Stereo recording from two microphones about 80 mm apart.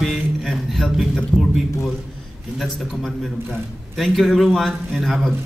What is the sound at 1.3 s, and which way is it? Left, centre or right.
Speech, centre.